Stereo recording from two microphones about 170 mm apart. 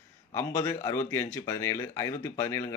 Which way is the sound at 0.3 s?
15° left (ahead or behind).